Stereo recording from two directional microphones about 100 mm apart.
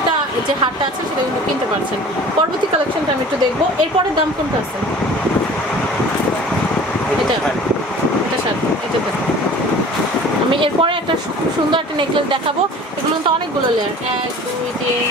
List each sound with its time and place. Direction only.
10.5 s speech: 60° right (ahead or behind)